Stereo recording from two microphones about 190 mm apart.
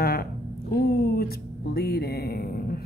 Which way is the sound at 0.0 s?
50° left (ahead or behind).